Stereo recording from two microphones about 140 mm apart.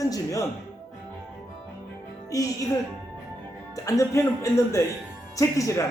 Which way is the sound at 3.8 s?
20° left (ahead or behind).